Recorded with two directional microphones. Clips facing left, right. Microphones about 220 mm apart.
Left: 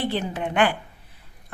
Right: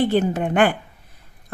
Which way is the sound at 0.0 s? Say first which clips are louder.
Right 7 dB; 45° right (ahead or behind).